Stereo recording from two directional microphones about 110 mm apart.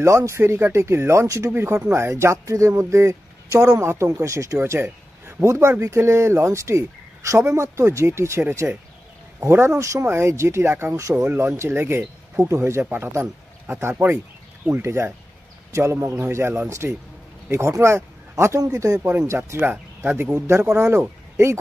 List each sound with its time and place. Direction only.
0.0 s speech: 25° right (ahead or behind)